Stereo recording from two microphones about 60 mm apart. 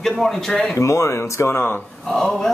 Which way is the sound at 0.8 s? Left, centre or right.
Left.